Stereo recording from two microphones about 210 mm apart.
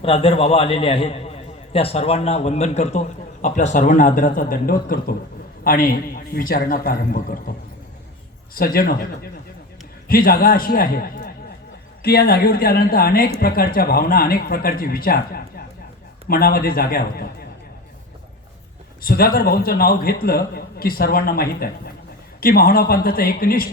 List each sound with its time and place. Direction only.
0.0 s a man's voice: 25° left (ahead or behind); by 7.3 s 45° left (ahead or behind)
8.5 s a man's voice: 45° left (ahead or behind)
10.1 s a man's voice: 45° left (ahead or behind)
19.0 s a man's voice: 45° left (ahead or behind)